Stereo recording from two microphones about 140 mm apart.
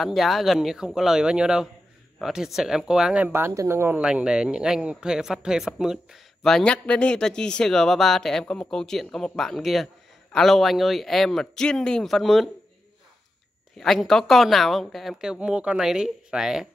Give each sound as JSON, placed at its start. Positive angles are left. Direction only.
{"t": 0.0, "sound": "speech", "side_deg": 0}
{"t": 3.3, "sound": "speech", "side_deg": -15}
{"t": 4.0, "sound": "speech", "side_deg": -5}
{"t": 13.7, "sound": "speech", "side_deg": 0}